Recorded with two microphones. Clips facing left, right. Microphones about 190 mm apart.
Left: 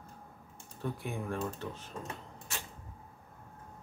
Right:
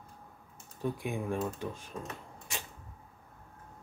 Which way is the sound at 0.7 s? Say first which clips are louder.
Right 3 dB; 15° right (ahead or behind).